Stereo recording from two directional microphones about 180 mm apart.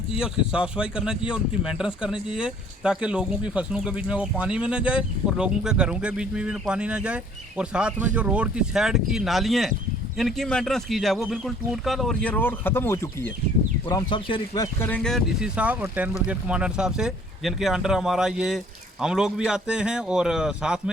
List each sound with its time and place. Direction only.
0.1 s speech: 5° right (ahead or behind); by 13.3 s 15° left (ahead or behind)
13.8 s speech: 25° left (ahead or behind)
14.8 s speech: 5° left (ahead or behind)